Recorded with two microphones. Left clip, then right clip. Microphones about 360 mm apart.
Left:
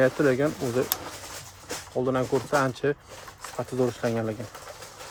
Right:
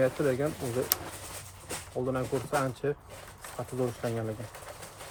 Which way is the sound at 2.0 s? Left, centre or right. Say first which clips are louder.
Left 6 dB; left.